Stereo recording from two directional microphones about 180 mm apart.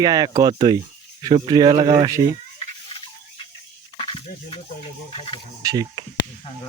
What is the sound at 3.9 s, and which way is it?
Speech, 30° left (ahead or behind).